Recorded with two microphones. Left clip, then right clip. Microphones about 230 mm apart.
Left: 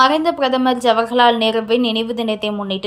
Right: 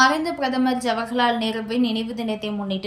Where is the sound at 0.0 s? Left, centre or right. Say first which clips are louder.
Left 5 dB; centre.